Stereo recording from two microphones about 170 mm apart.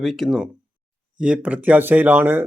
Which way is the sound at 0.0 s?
Centre (ahead or behind).